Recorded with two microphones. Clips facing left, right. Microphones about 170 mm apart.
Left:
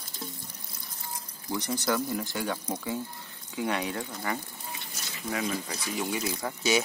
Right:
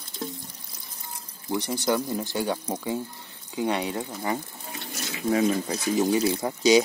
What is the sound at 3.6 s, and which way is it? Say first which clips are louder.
Speech: right 4 dB; 25° right (ahead or behind).